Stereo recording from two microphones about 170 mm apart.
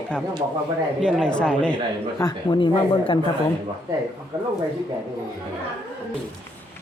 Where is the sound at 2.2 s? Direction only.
25° left (ahead or behind).